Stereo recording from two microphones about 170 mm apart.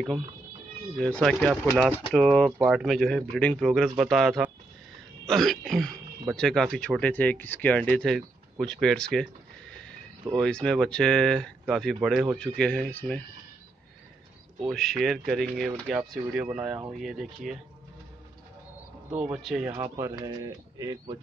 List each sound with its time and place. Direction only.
0.9 s speech: 5° left (ahead or behind)
5.2 s throat clearing: centre (ahead or behind)
6.3 s speech: 5° left (ahead or behind)
14.6 s speech: centre (ahead or behind)
19.1 s speech: 5° right (ahead or behind)
19.7 s speech: 15° right (ahead or behind)